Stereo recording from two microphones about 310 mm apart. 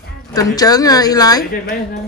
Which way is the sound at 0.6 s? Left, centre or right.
Centre.